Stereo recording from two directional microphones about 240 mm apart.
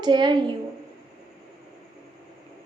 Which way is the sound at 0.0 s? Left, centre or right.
Centre.